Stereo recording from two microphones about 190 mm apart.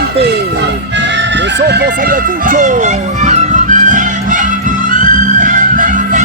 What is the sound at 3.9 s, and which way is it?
Music, 45° right (ahead or behind).